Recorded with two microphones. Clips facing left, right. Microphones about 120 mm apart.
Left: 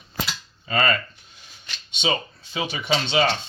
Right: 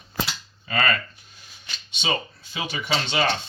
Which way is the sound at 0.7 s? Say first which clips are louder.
Left 2 dB; 25° left (ahead or behind).